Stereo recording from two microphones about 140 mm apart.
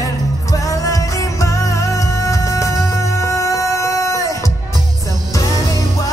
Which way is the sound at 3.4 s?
20° left (ahead or behind).